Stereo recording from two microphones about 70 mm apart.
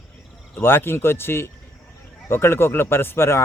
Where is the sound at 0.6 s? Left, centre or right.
Left.